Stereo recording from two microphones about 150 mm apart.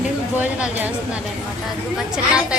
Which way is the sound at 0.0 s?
10° right (ahead or behind).